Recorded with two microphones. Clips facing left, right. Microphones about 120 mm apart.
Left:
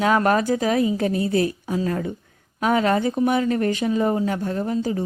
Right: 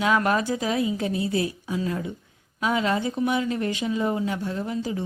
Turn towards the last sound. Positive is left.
turn(degrees=40)  # may be behind; listen again after turning